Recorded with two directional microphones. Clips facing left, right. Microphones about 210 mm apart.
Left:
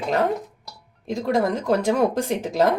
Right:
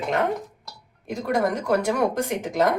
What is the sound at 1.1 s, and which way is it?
A woman's voice, 25° left (ahead or behind).